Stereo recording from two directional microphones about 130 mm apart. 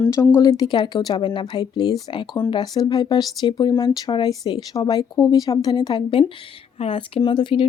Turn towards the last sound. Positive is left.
turn(degrees=40)  # may be behind; listen again after turning